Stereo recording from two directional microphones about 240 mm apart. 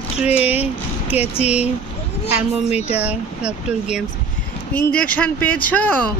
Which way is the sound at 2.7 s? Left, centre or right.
Left.